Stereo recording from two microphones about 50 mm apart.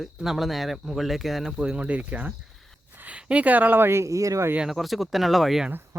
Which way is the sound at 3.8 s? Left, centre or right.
Right.